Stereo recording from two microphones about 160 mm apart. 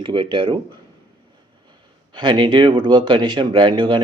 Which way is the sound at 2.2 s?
30° right (ahead or behind).